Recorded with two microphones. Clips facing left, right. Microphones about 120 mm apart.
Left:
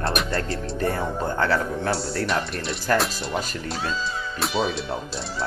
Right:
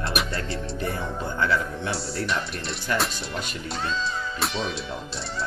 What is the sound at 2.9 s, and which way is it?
Music, centre (ahead or behind).